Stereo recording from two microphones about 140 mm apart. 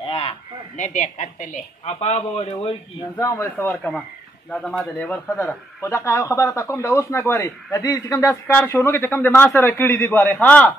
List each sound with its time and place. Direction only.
0.7 s speech: 65° left (ahead or behind); by 2.7 s 45° left (ahead or behind)
3.2 s a man's voice: 15° left (ahead or behind)
8.5 s a man's voice: 10° left (ahead or behind)